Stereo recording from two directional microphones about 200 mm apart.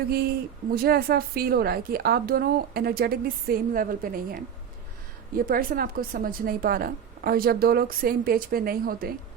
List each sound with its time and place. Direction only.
0.1 s a woman's voice: 50° right (ahead or behind)